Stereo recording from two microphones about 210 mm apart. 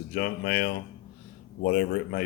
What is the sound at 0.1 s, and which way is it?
Speech, 45° left (ahead or behind).